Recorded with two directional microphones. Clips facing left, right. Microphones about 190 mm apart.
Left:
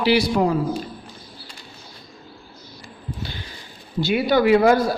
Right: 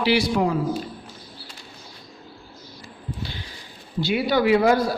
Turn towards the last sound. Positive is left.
turn(degrees=50)  # may be behind; listen again after turning